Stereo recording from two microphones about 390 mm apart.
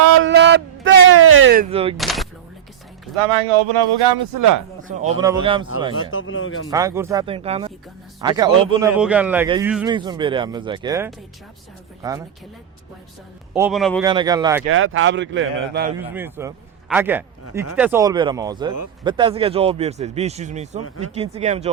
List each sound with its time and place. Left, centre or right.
0.0 s a sound: right
1.7 s speech: centre
2.0 s speech: centre
3.7 s speech: right
4.8 s speech: centre
5.9 s speech: left
6.7 s speech: centre
13.5 s a man's voice: centre
14.1 s speech: centre
14.7 s speech: right
16.0 s a man's voice: centre